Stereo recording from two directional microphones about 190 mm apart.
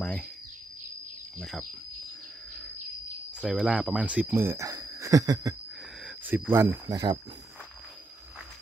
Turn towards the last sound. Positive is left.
turn(degrees=-20)  # may be behind; listen again after turning